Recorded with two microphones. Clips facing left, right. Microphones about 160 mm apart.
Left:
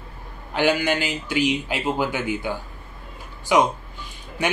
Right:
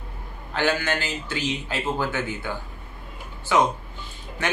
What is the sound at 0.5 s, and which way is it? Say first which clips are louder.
Speech: left 4 dB; 15° left (ahead or behind).